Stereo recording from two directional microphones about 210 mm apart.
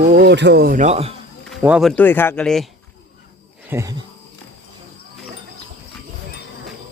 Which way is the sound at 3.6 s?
15° right (ahead or behind).